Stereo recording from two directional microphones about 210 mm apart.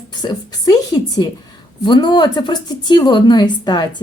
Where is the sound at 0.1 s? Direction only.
20° left (ahead or behind).